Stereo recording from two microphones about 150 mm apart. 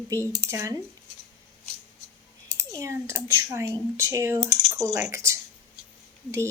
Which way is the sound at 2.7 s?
20° right (ahead or behind).